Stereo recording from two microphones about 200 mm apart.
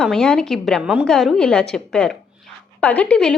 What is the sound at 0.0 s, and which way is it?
A woman's voice, centre (ahead or behind).